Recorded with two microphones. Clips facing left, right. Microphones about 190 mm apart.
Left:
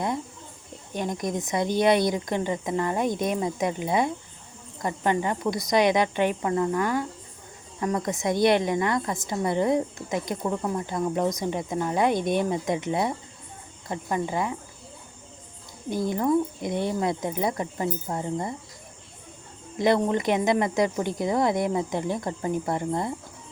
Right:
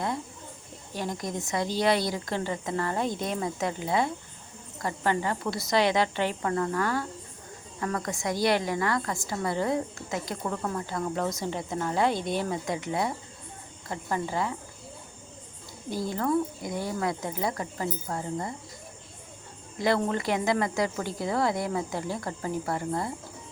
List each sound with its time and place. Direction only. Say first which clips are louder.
0.9 s a woman's voice: left 4 dB; 20° left (ahead or behind)
15.9 s a woman's voice: left 4 dB; 20° left (ahead or behind)
19.8 s a woman's voice: left 4 dB; 20° left (ahead or behind)